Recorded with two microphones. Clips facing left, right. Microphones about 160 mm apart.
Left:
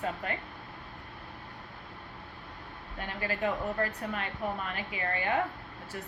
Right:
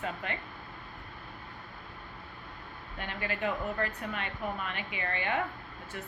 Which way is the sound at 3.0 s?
35° left (ahead or behind).